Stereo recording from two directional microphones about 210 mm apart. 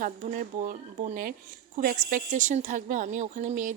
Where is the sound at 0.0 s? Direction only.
40° right (ahead or behind).